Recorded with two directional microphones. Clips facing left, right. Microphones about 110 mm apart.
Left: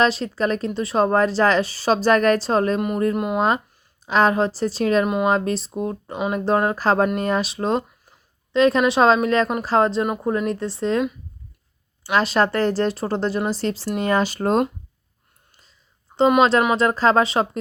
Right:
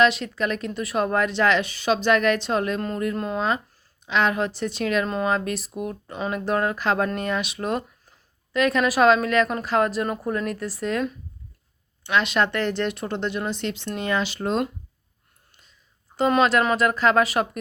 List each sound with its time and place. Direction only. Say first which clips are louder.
0.0 s speech: left 1 dB; 35° left (ahead or behind)
3.2 s speech: left 5 dB; 15° left (ahead or behind)
4.0 s speech: left 5 dB; 40° left (ahead or behind)
5.0 s speech: left 5 dB; 15° left (ahead or behind)
5.3 s a woman's voice: left 4 dB; 30° left (ahead or behind)
12.1 s speech: left 3 dB; 35° left (ahead or behind)
16.4 s a woman's voice: left 3 dB; 30° left (ahead or behind)